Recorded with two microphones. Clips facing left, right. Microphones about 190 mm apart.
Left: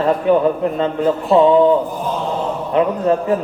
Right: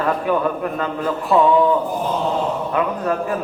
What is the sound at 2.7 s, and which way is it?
Speech, 25° left (ahead or behind).